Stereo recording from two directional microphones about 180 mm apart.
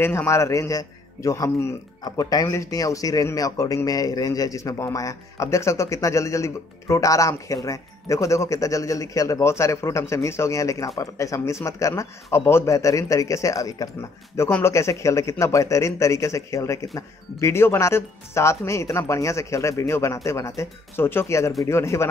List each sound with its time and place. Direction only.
0.0 s a man's voice: 15° left (ahead or behind)